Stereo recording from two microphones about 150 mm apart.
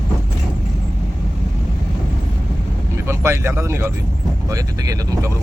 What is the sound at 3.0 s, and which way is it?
Speech, 15° right (ahead or behind).